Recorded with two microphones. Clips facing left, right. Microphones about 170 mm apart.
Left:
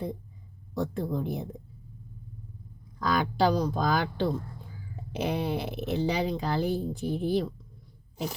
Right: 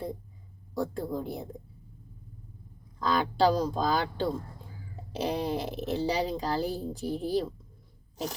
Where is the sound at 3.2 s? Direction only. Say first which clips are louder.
Right 1 dB; centre (ahead or behind).